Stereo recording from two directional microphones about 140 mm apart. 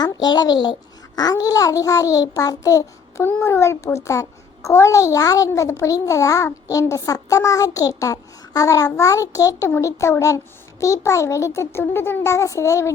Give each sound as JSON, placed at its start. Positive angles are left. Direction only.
{"t": 0.0, "sound": "a child's voice", "side_deg": 30}